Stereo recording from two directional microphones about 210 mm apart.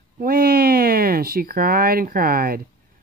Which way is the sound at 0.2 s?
45° right (ahead or behind).